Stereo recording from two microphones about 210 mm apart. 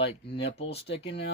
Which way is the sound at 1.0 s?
55° left (ahead or behind).